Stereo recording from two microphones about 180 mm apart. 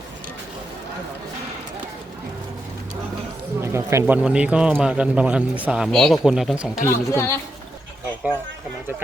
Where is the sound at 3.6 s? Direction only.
15° right (ahead or behind).